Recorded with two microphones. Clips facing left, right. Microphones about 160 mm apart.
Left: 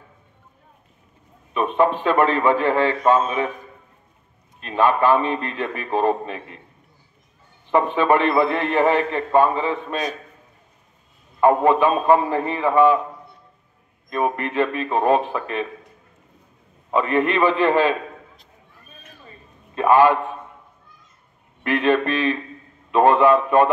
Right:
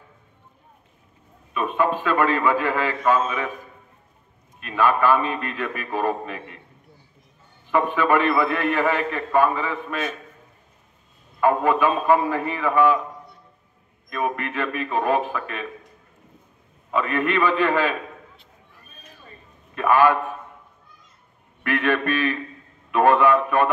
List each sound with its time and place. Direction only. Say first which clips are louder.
1.5 s a man's voice: left 3 dB; 25° left (ahead or behind)
4.6 s a man's voice: left 2 dB; 25° left (ahead or behind)
7.7 s a man's voice: left 2 dB; 25° left (ahead or behind)
11.4 s a man's voice: left 3 dB; 25° left (ahead or behind)
14.1 s a man's voice: left 4 dB; 25° left (ahead or behind)
16.9 s a man's voice: left 3 dB; 25° left (ahead or behind)
19.7 s a man's voice: left 3 dB; 25° left (ahead or behind)
21.6 s a man's voice: left 3 dB; 20° left (ahead or behind)